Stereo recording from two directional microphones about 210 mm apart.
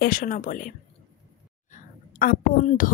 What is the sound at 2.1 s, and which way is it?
Speech, 40° left (ahead or behind).